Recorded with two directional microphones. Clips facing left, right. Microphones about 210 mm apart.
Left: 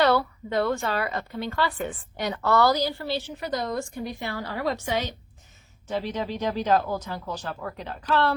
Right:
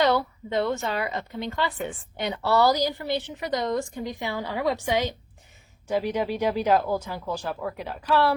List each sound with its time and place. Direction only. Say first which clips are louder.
0.0 s a woman's voice: left 1 dB; 20° right (ahead or behind)